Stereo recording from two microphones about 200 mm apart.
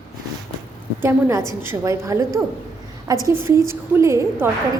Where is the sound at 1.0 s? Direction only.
15° right (ahead or behind).